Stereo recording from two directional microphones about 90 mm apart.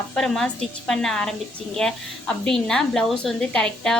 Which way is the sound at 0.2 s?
5° left (ahead or behind).